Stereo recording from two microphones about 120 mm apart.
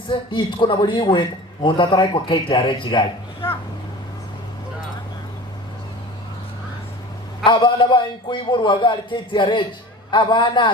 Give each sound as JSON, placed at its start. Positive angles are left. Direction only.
{"t": 0.1, "sound": "a man's voice", "side_deg": 45}
{"t": 7.4, "sound": "a man's voice", "side_deg": 40}